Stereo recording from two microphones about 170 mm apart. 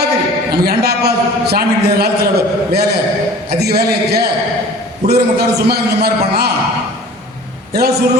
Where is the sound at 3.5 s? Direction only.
70° right (ahead or behind).